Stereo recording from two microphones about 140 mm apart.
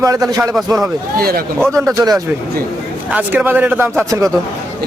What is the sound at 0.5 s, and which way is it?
Speech, centre (ahead or behind).